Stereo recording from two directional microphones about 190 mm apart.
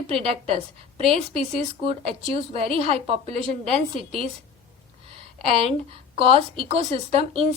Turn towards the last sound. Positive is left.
turn(degrees=-30)  # may be behind; listen again after turning